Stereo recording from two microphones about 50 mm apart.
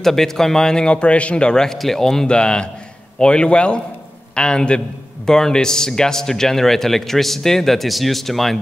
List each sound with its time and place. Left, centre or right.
0.0 s a man's voice: centre